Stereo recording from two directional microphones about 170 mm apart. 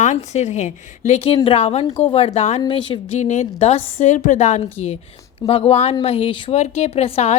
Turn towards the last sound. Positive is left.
turn(degrees=35)  # may be behind; listen again after turning